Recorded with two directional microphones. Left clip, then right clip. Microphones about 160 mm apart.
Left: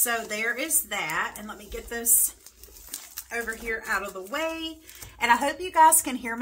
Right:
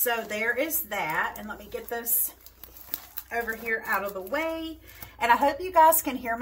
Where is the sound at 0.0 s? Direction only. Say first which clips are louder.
Even; 30° left (ahead or behind).